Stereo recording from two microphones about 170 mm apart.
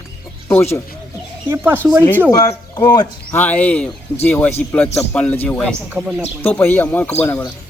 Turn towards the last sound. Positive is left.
turn(degrees=10)  # may be behind; listen again after turning